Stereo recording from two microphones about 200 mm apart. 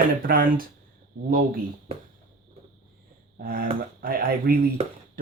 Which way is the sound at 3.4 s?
45° right (ahead or behind).